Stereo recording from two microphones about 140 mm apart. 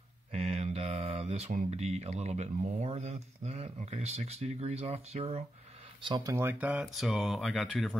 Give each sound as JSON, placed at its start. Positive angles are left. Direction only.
{"t": 0.3, "sound": "mantra", "side_deg": -50}
{"t": 1.7, "sound": "speech", "side_deg": -50}
{"t": 6.0, "sound": "speech", "side_deg": -35}
{"t": 6.3, "sound": "speech", "side_deg": -15}